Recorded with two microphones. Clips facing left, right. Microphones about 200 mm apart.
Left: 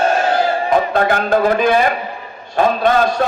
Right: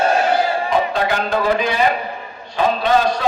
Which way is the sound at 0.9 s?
50° left (ahead or behind).